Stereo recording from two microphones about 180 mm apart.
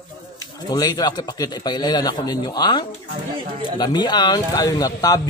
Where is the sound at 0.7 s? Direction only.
20° left (ahead or behind).